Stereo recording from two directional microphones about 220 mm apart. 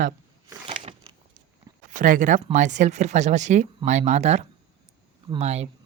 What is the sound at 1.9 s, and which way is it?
Speech, 35° right (ahead or behind).